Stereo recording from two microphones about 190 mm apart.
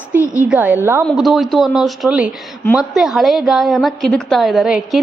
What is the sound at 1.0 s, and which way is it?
A woman's voice, centre (ahead or behind).